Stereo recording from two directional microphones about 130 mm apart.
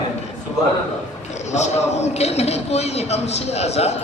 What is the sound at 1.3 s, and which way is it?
A man's voice, 60° left (ahead or behind).